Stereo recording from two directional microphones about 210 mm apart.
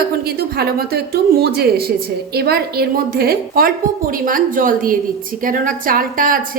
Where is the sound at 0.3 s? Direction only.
50° right (ahead or behind).